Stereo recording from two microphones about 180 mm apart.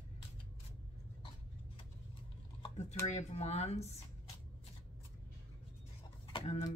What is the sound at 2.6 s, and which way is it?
Speech, 35° left (ahead or behind).